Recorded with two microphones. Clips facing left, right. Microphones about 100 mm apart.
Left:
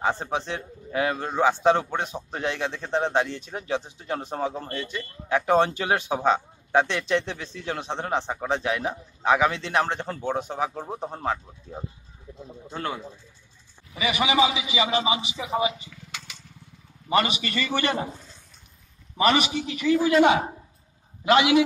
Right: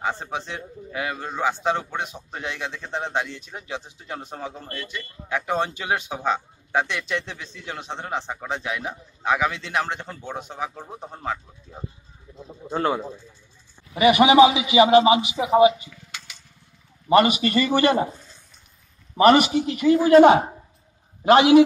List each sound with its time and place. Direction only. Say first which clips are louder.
0.2 s a man's voice: left 2 dB; 30° left (ahead or behind)
13.9 s a man's voice: right 9 dB; 60° right (ahead or behind)
17.2 s a man's voice: right 8 dB; 50° right (ahead or behind)
19.1 s a man's voice: right 7 dB; 50° right (ahead or behind)